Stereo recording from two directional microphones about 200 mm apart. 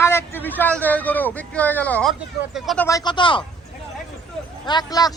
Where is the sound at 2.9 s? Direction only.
20° left (ahead or behind).